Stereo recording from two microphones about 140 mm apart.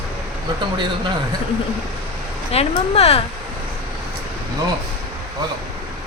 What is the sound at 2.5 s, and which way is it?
Speech, 45° left (ahead or behind).